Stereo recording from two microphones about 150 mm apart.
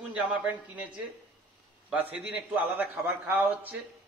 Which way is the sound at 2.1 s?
10° right (ahead or behind).